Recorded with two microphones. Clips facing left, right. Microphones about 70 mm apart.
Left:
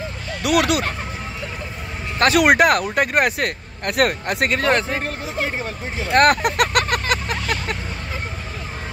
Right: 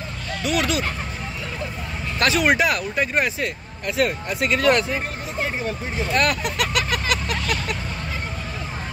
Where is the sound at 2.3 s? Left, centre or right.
Left.